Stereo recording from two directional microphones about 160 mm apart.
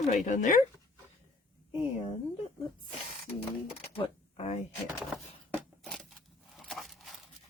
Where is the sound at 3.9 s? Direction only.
35° left (ahead or behind).